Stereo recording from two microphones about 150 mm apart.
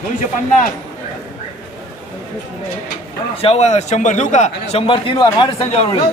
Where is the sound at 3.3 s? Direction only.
40° left (ahead or behind).